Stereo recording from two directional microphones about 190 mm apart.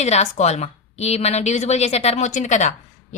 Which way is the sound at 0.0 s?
35° left (ahead or behind).